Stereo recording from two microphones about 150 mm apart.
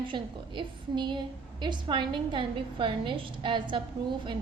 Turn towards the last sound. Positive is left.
turn(degrees=-30)  # may be behind; listen again after turning